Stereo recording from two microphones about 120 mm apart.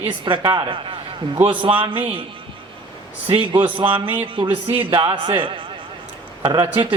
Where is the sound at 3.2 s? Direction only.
45° right (ahead or behind).